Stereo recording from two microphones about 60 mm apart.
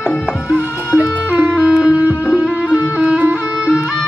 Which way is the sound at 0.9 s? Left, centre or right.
Right.